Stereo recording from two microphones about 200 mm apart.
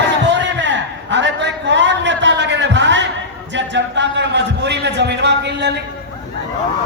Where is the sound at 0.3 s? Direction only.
65° right (ahead or behind).